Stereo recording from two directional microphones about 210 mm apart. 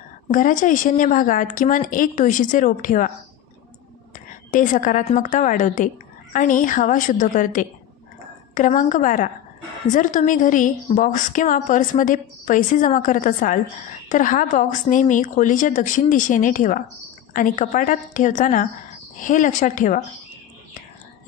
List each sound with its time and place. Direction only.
0.3 s a woman's voice: 40° left (ahead or behind)
4.5 s a woman's voice: 40° left (ahead or behind)